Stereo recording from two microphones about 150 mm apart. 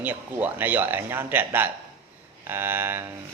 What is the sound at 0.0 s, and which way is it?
Speech, 10° right (ahead or behind).